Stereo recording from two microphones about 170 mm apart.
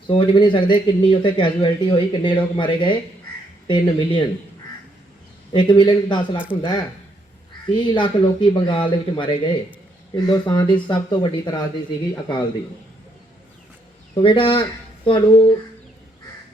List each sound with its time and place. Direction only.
0.1 s a man's voice: 30° left (ahead or behind)
5.5 s a man's voice: 30° left (ahead or behind)
14.2 s speech: 30° left (ahead or behind)